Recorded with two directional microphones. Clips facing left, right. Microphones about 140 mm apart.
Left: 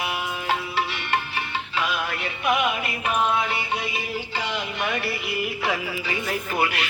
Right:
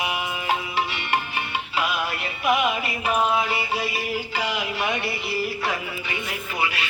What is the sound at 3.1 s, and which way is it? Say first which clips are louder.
Music: right 1 dB; 5° right (ahead or behind).